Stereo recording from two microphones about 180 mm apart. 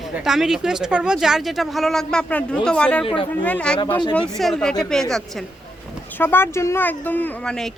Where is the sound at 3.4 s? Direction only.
5° left (ahead or behind).